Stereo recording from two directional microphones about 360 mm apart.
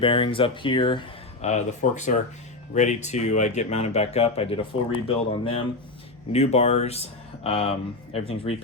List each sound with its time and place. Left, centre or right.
0.0 s speech: centre